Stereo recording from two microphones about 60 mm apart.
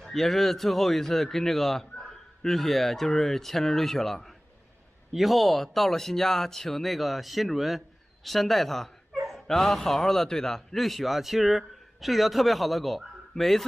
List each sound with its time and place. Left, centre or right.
0.0 s a man's voice: centre